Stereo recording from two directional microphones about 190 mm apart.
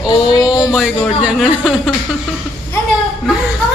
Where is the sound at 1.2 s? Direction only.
Centre (ahead or behind).